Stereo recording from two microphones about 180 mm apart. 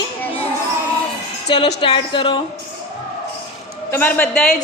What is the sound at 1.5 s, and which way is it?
Speech, 30° left (ahead or behind).